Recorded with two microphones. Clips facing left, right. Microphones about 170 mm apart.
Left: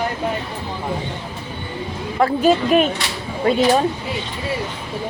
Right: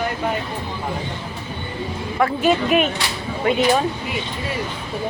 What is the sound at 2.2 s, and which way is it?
Speech, 35° left (ahead or behind).